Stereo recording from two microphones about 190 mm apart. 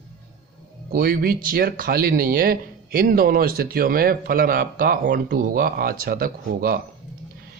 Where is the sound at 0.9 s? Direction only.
50° right (ahead or behind).